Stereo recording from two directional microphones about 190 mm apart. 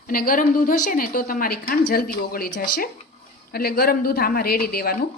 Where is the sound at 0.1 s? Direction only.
50° left (ahead or behind).